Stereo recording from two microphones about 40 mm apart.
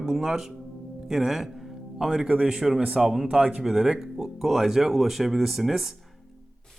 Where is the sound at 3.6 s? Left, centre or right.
Centre.